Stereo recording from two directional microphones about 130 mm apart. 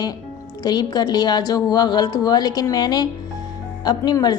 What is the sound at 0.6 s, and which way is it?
A woman's voice, 30° left (ahead or behind).